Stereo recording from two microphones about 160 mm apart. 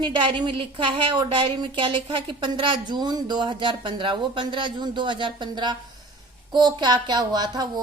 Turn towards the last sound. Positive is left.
turn(degrees=-25)  # may be behind; listen again after turning